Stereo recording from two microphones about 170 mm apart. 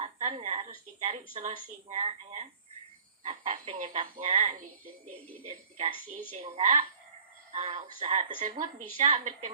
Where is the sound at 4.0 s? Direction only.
30° right (ahead or behind).